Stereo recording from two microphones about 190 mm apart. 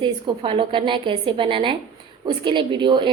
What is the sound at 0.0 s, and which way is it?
Speech, 25° right (ahead or behind).